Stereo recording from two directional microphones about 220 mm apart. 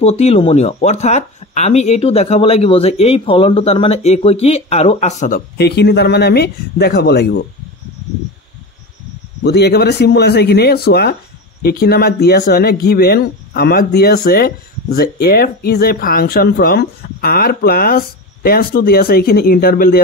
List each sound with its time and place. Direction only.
0.0 s speech: 30° left (ahead or behind)
5.6 s speech: 50° left (ahead or behind)
9.4 s speech: 50° left (ahead or behind)